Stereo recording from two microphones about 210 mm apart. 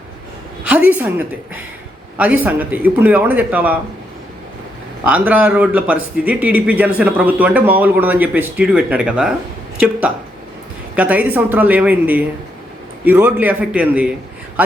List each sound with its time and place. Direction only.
0.7 s a woman's voice: 5° right (ahead or behind)
2.1 s a man's voice: 5° right (ahead or behind)
5.0 s a man's voice: 5° right (ahead or behind)
10.9 s a man's voice: 5° right (ahead or behind)